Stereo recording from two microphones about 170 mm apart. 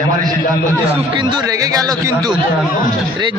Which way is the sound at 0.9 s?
30° right (ahead or behind).